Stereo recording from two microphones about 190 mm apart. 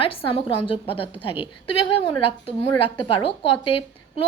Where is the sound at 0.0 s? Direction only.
30° left (ahead or behind).